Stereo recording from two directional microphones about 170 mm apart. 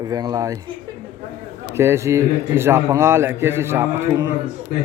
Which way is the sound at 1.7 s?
15° right (ahead or behind).